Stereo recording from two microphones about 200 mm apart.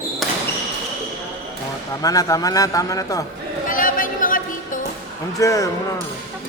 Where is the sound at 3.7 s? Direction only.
45° left (ahead or behind).